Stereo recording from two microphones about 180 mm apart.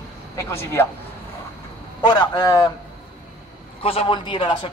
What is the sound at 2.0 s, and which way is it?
Speech, 25° left (ahead or behind).